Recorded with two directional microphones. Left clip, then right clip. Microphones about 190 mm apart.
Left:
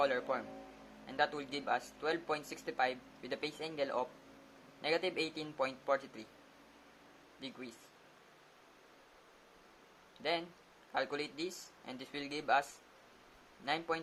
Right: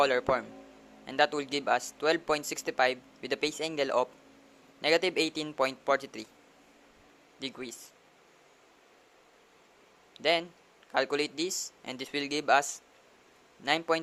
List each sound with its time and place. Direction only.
0.0 s speech: 45° right (ahead or behind)
7.3 s speech: 45° right (ahead or behind)
10.2 s speech: 45° right (ahead or behind)
13.7 s speech: 45° right (ahead or behind)